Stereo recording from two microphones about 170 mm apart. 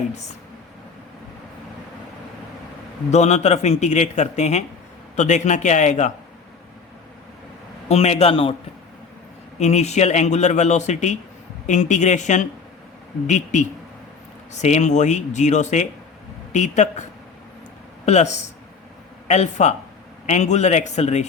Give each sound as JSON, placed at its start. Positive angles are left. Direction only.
{"t": 3.1, "sound": "a man's voice", "side_deg": 40}
{"t": 7.9, "sound": "a man's voice", "side_deg": 40}
{"t": 9.6, "sound": "a man's voice", "side_deg": 40}